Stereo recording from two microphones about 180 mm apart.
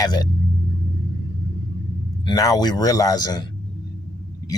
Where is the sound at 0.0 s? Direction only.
20° left (ahead or behind).